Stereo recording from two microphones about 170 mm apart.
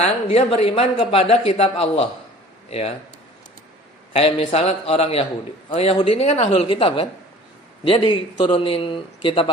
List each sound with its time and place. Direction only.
0.3 s speech: 35° left (ahead or behind)
4.1 s speech: 35° left (ahead or behind)